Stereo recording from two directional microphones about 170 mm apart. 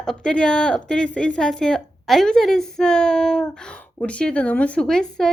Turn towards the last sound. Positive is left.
turn(degrees=5)  # may be behind; listen again after turning